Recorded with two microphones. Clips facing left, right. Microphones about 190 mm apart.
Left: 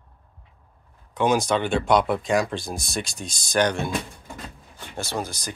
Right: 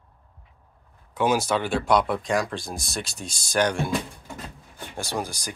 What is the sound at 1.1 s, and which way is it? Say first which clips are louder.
Speech: left 2 dB; 5° right (ahead or behind).